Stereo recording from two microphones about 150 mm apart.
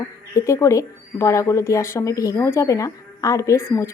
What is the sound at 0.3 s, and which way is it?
Speech, 20° left (ahead or behind).